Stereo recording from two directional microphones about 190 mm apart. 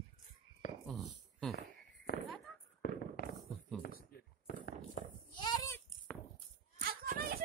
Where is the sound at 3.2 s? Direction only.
55° left (ahead or behind).